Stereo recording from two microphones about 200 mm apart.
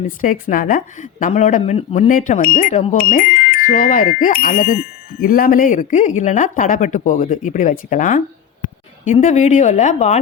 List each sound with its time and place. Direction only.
0.0 s speech: 40° left (ahead or behind)